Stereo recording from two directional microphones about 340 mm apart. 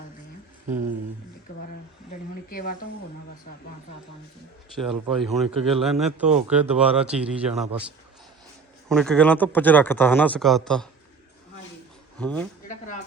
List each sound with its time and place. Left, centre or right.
2.5 s speech: left
4.9 s speech: centre
8.9 s speech: centre
12.2 s speech: centre